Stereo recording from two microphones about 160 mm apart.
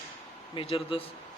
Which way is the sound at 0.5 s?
35° left (ahead or behind).